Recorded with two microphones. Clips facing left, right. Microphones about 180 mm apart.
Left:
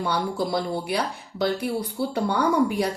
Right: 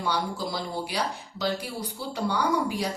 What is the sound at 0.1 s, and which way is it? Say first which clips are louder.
A woman's voice: left 3 dB; 55° left (ahead or behind).